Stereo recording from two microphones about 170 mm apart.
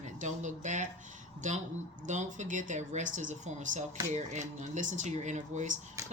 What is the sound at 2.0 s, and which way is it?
Speech, 45° right (ahead or behind).